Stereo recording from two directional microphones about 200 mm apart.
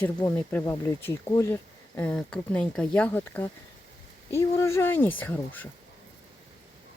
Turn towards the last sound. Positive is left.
turn(degrees=10)  # may be behind; listen again after turning